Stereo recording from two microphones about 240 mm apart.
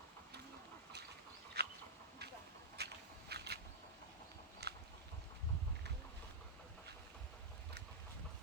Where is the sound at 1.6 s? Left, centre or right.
Right.